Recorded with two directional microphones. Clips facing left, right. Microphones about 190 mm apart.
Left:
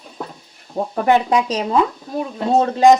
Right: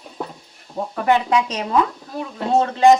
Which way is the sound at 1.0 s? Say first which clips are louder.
Left 2 dB; 30° left (ahead or behind).